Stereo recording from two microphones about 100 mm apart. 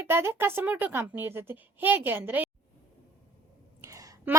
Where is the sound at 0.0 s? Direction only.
25° right (ahead or behind).